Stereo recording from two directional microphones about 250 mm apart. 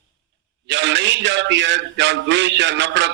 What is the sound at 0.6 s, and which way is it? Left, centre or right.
A man's voice, right.